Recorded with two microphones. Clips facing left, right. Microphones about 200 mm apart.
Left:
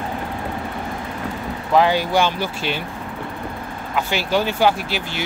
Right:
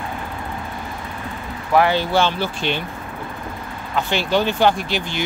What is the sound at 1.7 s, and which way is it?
Speech, 15° left (ahead or behind).